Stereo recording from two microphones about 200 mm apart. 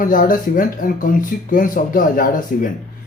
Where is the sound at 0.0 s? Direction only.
45° left (ahead or behind).